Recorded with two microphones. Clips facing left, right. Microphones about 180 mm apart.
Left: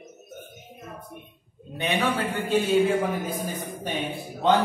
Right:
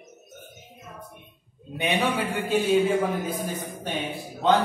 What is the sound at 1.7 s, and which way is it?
A man's voice, 10° right (ahead or behind).